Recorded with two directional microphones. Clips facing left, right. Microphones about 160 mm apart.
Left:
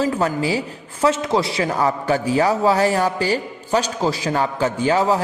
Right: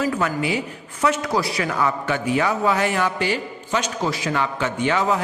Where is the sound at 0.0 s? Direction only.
30° left (ahead or behind).